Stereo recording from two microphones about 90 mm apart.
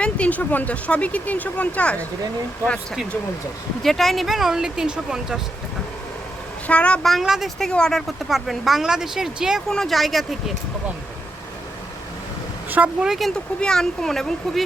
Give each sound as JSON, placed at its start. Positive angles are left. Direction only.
{"t": 0.0, "sound": "speech", "side_deg": 15}
{"t": 3.8, "sound": "speech", "side_deg": 0}
{"t": 6.7, "sound": "speech", "side_deg": 15}
{"t": 7.0, "sound": "speech", "side_deg": 0}
{"t": 12.7, "sound": "speech", "side_deg": -15}
{"t": 13.1, "sound": "speech", "side_deg": 0}